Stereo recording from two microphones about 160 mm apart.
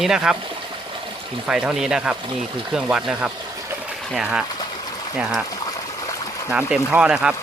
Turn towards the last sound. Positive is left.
turn(degrees=-5)  # may be behind; listen again after turning